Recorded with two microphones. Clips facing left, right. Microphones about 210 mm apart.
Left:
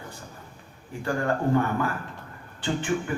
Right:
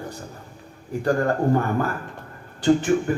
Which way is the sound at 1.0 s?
40° right (ahead or behind).